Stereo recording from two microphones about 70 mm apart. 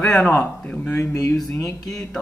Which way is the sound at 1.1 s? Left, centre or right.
Left.